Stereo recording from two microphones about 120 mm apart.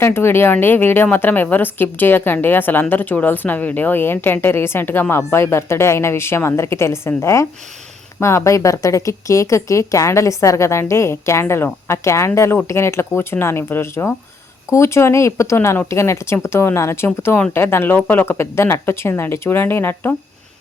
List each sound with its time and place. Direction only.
0.0 s a woman's voice: 20° left (ahead or behind)